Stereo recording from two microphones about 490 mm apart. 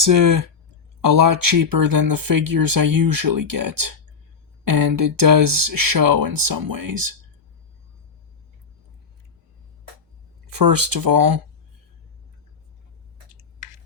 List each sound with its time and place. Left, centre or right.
0.0 s speech: right
10.4 s speech: right